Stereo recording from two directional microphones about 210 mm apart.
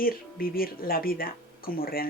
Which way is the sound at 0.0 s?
45° left (ahead or behind).